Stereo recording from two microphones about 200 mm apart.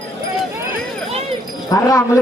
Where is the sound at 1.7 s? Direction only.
15° left (ahead or behind).